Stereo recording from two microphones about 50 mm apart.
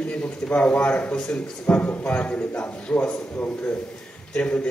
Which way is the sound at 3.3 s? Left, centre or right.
Left.